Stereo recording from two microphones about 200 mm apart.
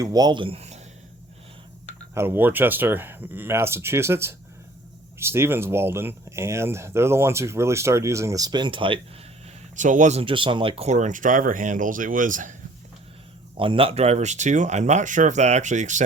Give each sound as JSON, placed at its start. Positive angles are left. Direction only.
{"t": 0.0, "sound": "speech", "side_deg": -20}
{"t": 2.1, "sound": "speech", "side_deg": -10}
{"t": 9.7, "sound": "speech", "side_deg": -40}
{"t": 13.6, "sound": "speech", "side_deg": -25}